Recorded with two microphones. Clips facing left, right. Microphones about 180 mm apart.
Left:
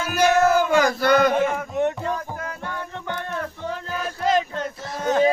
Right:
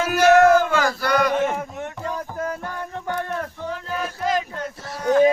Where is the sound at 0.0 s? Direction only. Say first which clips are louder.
Right 4 dB; 80° right.